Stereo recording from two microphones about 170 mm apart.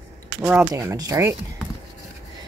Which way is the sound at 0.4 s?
10° right (ahead or behind).